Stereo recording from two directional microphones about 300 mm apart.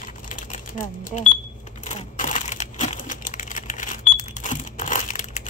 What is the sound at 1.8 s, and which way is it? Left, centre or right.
Crushing, left.